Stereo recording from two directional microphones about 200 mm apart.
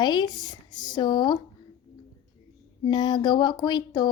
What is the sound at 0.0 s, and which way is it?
Speech, 20° left (ahead or behind).